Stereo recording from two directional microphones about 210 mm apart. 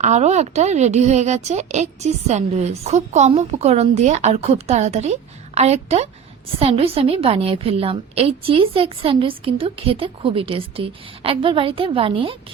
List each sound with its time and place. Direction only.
0.0 s a woman's voice: 35° right (ahead or behind)